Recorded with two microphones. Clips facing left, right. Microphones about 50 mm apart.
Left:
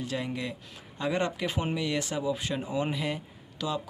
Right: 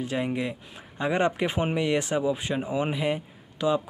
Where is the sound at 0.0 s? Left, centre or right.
Right.